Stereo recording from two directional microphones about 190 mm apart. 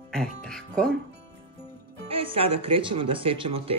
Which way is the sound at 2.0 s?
30° right (ahead or behind).